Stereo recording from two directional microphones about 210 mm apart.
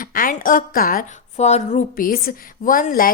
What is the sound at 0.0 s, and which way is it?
Speech, 40° left (ahead or behind).